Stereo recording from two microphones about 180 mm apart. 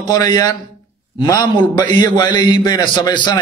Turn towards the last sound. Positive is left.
turn(degrees=25)  # may be behind; listen again after turning